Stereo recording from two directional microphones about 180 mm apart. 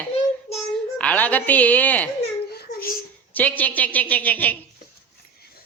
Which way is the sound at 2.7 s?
40° left (ahead or behind).